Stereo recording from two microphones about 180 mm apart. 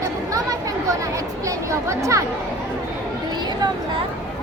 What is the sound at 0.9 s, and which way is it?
Chatter, 15° right (ahead or behind).